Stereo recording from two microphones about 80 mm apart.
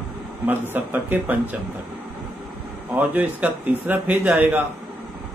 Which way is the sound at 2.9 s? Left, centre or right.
Right.